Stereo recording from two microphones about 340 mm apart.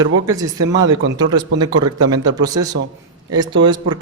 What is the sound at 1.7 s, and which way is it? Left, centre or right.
Speech, right.